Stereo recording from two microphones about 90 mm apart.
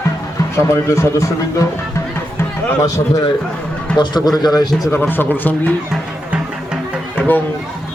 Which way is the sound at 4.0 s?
50° left (ahead or behind).